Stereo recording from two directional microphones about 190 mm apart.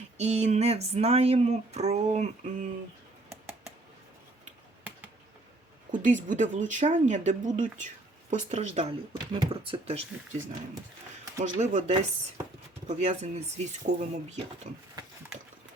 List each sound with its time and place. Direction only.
0.2 s speech: 35° right (ahead or behind)
5.9 s speech: 45° right (ahead or behind)
11.6 s speech: 40° right (ahead or behind)